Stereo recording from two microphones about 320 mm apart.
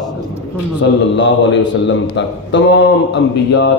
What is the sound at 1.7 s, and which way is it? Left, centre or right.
A man's voice, left.